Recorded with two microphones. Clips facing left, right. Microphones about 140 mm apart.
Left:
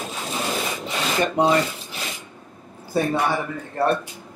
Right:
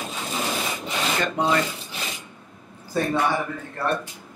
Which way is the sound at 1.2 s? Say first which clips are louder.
Left 5 dB; 25° left (ahead or behind).